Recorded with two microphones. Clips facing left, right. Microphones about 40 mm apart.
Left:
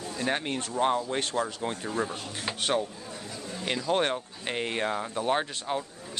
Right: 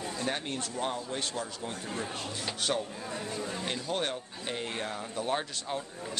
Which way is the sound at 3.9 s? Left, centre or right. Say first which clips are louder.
Left 9 dB; left.